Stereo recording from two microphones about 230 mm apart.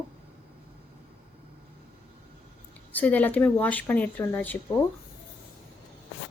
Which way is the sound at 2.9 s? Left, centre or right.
Centre.